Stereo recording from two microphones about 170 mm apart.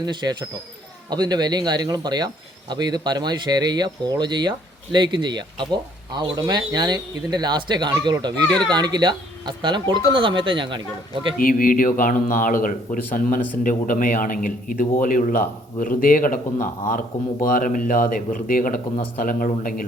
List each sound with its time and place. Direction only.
0.0 s speech: 25° right (ahead or behind)
8.4 s speech: 5° left (ahead or behind)
8.7 s speech: 25° right (ahead or behind)
11.3 s a man's voice: 55° left (ahead or behind)